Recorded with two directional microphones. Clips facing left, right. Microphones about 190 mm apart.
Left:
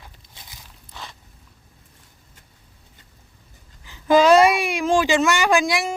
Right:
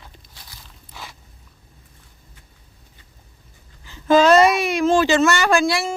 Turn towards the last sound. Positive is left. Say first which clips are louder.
# right 1 dB
turn(degrees=15)  # may be behind; listen again after turning